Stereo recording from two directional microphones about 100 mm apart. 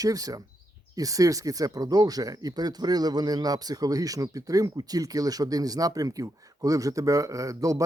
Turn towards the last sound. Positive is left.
turn(degrees=-35)  # may be behind; listen again after turning